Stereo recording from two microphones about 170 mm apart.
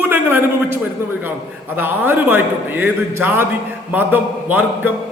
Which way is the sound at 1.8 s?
10° right (ahead or behind).